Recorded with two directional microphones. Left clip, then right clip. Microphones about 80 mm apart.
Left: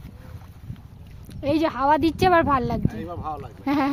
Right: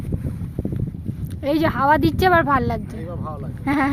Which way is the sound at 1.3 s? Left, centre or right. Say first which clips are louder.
Right 2 dB; centre.